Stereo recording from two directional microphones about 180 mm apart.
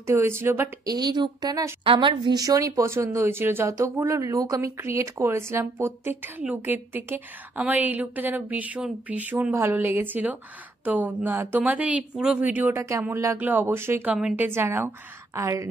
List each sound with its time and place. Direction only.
0.0 s speech: 15° right (ahead or behind)